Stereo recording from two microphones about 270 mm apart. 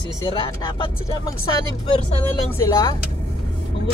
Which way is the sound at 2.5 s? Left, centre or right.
Centre.